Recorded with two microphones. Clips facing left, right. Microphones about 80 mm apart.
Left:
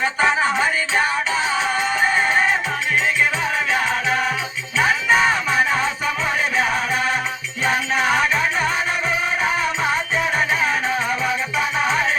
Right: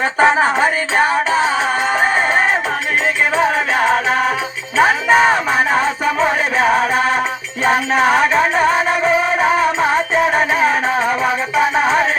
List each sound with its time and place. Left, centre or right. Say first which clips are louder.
0.0 s music: right 6 dB; right
4.8 s music: right 5 dB; right